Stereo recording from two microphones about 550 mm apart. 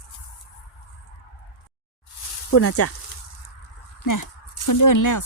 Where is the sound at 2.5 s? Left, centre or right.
Left.